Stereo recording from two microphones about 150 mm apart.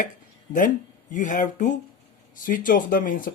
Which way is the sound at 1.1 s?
60° left (ahead or behind).